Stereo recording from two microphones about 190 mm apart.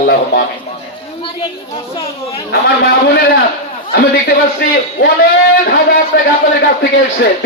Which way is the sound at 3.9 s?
55° left (ahead or behind).